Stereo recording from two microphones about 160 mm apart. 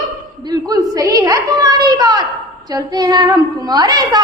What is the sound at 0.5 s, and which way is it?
A woman's voice, 25° right (ahead or behind).